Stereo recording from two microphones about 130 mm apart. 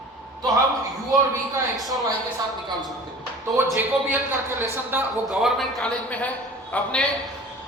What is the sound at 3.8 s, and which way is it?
A man's voice, 15° right (ahead or behind).